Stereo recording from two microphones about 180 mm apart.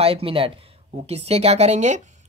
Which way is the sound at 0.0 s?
30° right (ahead or behind).